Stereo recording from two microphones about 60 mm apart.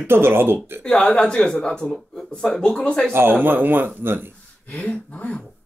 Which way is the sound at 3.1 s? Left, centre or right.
Right.